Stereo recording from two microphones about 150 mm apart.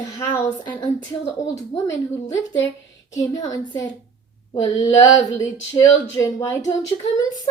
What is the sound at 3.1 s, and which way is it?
Speech, 20° left (ahead or behind).